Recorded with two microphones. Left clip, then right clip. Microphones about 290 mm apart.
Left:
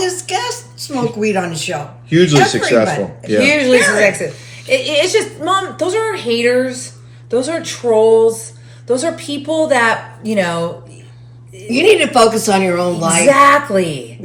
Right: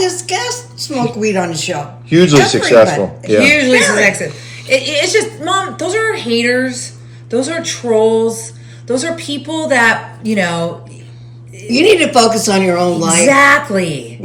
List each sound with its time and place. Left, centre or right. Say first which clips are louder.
0.0 s a woman's voice: right 2 dB; centre
2.0 s speech: right 2 dB; centre
3.4 s a woman's voice: right 1 dB; centre
3.8 s speech: right 1 dB; centre
4.7 s a woman's voice: right 1 dB; centre
11.7 s speech: right 1 dB; centre
13.2 s a woman's voice: even; centre